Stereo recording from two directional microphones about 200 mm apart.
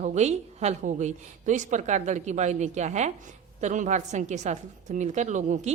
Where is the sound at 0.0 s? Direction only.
35° right (ahead or behind).